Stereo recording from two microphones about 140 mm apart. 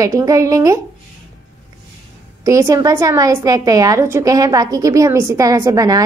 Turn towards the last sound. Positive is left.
turn(degrees=-25)  # may be behind; listen again after turning